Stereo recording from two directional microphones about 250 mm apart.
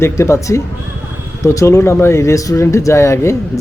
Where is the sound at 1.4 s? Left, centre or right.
Centre.